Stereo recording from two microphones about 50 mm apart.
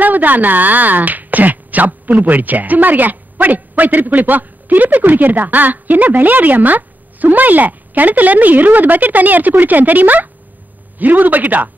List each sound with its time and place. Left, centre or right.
0.0 s speech: right